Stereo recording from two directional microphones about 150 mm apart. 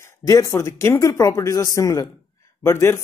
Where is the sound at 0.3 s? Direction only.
20° left (ahead or behind).